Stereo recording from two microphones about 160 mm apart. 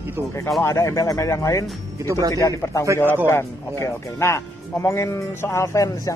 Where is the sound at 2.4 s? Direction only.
20° left (ahead or behind).